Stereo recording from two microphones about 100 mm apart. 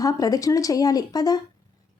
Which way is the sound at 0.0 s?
35° left (ahead or behind).